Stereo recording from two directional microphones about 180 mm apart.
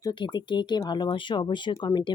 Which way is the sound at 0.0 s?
25° left (ahead or behind).